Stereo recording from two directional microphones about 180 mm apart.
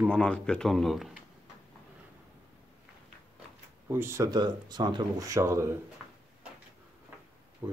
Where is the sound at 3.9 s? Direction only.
15° right (ahead or behind).